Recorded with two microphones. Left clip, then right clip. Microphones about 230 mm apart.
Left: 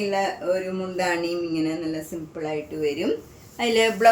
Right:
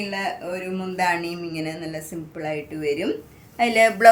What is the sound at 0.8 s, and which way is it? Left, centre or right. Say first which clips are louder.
A woman's voice: right 2 dB; right.